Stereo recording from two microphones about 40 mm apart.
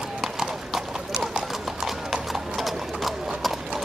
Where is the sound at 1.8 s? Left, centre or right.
Centre.